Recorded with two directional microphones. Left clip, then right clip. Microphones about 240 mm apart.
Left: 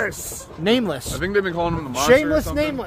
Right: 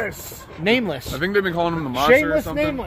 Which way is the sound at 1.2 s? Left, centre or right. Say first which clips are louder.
Right 1 dB; right.